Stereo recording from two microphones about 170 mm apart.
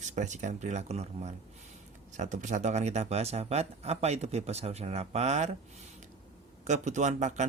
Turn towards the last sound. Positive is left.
turn(degrees=-45)  # may be behind; listen again after turning